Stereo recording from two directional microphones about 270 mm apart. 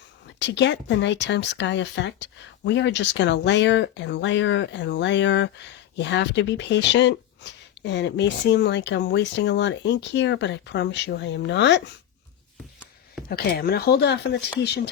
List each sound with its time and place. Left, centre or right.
0.3 s speech: left
13.2 s speech: left